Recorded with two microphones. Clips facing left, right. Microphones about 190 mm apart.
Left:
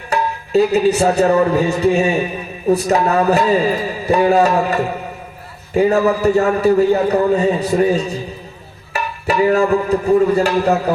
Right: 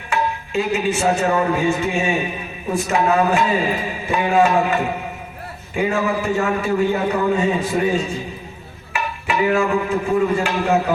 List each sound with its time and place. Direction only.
0.1 s music: 40° left (ahead or behind)
2.7 s a man's voice: 40° left (ahead or behind)
8.9 s music: 40° left (ahead or behind)